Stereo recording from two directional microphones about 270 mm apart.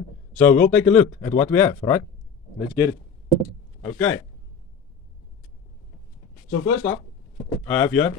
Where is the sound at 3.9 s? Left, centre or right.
Centre.